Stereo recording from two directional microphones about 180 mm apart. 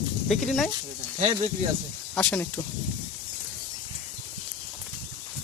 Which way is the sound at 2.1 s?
5° left (ahead or behind).